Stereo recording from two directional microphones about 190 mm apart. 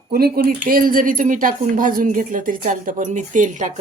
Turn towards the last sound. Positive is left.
turn(degrees=-40)  # may be behind; listen again after turning